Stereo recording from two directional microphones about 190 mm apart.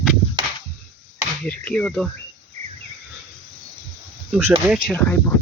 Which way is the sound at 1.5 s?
5° left (ahead or behind).